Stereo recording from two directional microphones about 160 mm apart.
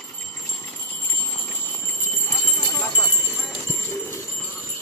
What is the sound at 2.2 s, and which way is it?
Clip-clop, 20° left (ahead or behind).